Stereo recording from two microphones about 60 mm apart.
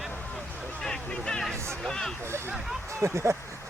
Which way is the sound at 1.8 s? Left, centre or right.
Centre.